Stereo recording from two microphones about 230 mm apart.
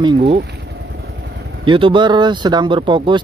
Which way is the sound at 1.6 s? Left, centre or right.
Right.